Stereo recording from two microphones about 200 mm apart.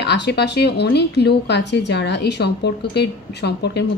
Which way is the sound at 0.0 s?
60° left (ahead or behind).